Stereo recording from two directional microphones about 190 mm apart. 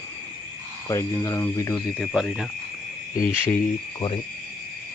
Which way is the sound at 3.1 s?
15° left (ahead or behind).